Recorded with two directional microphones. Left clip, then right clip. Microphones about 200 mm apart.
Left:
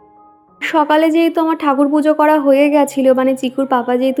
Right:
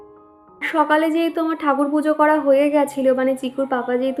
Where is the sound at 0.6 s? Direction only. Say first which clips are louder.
Left 5 dB; 35° left (ahead or behind).